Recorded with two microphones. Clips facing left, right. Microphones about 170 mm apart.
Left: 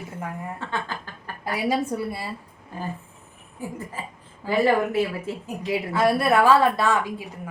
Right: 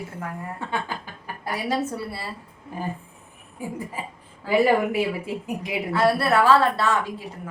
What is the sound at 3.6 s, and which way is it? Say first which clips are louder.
Speech: right 2 dB; 15° right (ahead or behind).